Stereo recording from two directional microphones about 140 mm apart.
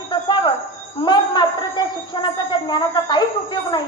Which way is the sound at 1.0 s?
30° left (ahead or behind).